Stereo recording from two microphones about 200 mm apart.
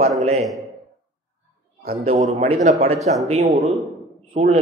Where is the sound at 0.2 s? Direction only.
30° right (ahead or behind).